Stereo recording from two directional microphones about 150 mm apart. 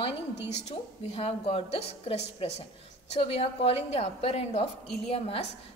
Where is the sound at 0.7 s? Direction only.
40° left (ahead or behind).